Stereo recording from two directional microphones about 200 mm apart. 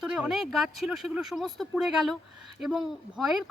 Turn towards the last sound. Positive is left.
turn(degrees=0)  # may be behind; listen again after turning